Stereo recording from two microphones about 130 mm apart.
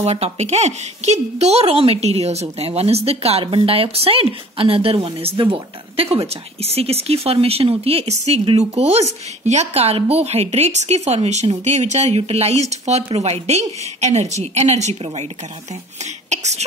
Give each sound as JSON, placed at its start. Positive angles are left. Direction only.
{"t": 0.0, "sound": "speech", "side_deg": -55}